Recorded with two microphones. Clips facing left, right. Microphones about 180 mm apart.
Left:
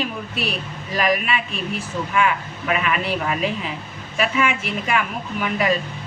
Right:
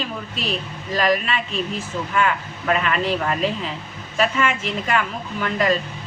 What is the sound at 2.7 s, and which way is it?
Speech, 10° left (ahead or behind).